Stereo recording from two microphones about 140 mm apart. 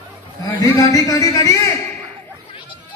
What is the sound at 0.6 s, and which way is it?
A man's voice, 25° left (ahead or behind).